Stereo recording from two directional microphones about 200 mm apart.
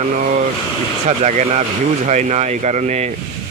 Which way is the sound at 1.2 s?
35° right (ahead or behind).